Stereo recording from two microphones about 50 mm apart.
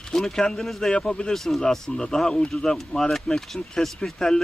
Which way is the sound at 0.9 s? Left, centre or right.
Centre.